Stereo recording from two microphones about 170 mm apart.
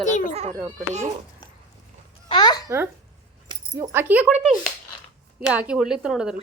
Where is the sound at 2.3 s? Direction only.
25° left (ahead or behind).